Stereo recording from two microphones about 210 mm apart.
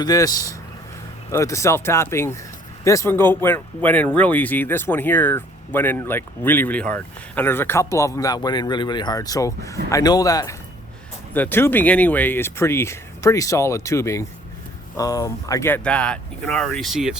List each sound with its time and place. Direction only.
0.0 s speech: 15° left (ahead or behind); by 17.2 s centre (ahead or behind)